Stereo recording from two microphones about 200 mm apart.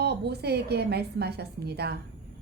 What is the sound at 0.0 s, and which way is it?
A woman's voice, 55° right (ahead or behind).